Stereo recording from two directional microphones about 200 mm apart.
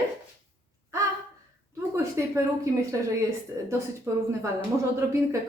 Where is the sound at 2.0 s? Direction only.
15° right (ahead or behind).